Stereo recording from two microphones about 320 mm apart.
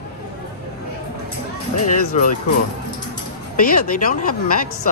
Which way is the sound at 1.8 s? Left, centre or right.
Left.